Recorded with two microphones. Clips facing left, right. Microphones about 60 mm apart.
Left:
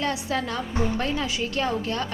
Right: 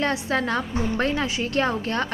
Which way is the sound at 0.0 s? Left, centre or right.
Right.